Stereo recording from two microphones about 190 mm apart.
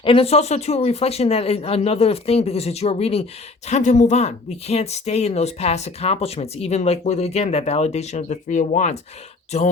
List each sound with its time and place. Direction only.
0.0 s speech: 30° left (ahead or behind)